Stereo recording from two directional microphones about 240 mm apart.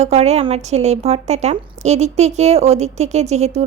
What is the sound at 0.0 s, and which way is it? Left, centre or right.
A woman's voice, right.